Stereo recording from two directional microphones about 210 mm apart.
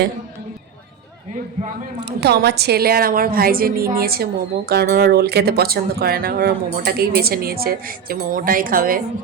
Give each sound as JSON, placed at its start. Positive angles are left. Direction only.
{"t": 2.0, "sound": "speech", "side_deg": -55}